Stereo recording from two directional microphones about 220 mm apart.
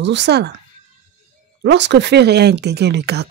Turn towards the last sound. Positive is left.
turn(degrees=-50)  # may be behind; listen again after turning